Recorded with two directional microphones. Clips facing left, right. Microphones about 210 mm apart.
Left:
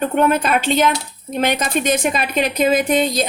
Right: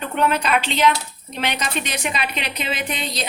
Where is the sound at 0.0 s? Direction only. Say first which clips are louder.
Left 5 dB; 50° left (ahead or behind).